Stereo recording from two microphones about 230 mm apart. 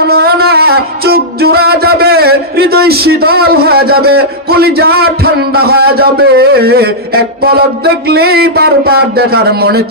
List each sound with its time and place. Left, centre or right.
0.1 s music: right